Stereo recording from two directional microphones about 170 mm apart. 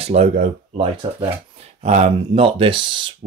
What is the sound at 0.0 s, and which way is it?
Speech, 40° right (ahead or behind).